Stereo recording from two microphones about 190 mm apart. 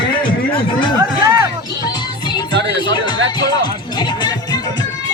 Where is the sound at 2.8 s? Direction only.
25° left (ahead or behind).